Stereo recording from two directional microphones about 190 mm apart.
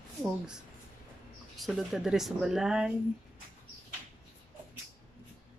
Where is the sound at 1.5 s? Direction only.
Centre (ahead or behind).